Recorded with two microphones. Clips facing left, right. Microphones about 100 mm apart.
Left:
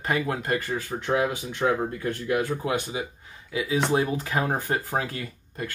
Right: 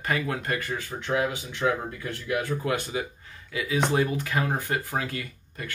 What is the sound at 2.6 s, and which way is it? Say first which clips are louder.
Speech: even; 20° left (ahead or behind).